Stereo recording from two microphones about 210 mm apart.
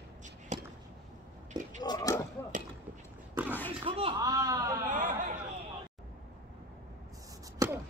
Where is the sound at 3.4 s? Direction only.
10° right (ahead or behind).